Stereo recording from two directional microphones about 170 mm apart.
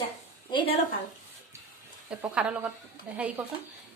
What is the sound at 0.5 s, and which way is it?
Speech, 35° left (ahead or behind).